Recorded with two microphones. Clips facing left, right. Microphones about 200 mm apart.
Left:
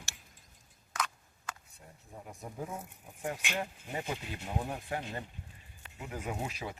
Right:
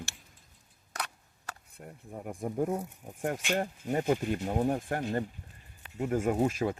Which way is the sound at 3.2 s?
50° right (ahead or behind).